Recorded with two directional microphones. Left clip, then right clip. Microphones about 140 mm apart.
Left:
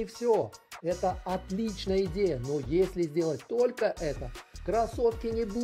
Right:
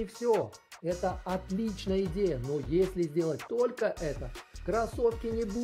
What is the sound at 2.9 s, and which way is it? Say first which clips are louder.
Speech: left 1 dB; 25° left (ahead or behind).